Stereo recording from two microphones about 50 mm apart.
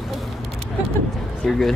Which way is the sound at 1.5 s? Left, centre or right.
Centre.